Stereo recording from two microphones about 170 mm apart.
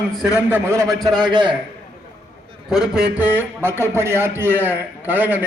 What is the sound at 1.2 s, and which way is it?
Speech, 30° right (ahead or behind).